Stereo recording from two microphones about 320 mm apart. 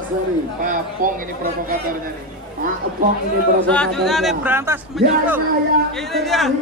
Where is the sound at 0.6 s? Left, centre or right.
Right.